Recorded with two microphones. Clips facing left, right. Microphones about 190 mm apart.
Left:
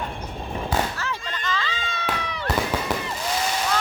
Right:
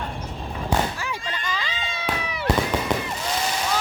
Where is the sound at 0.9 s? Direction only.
10° right (ahead or behind).